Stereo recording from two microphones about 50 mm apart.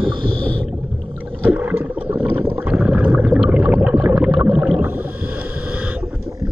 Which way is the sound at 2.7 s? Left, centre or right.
Right.